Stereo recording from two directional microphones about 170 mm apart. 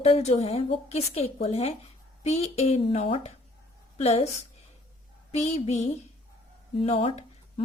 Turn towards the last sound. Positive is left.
turn(degrees=35)  # may be behind; listen again after turning